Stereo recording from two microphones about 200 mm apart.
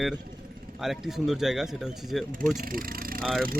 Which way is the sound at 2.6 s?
45° right (ahead or behind).